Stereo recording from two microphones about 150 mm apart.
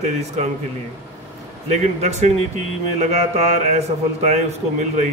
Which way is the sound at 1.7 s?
45° right (ahead or behind).